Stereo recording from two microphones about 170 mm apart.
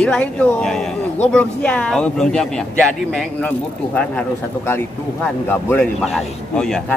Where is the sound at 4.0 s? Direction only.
10° left (ahead or behind).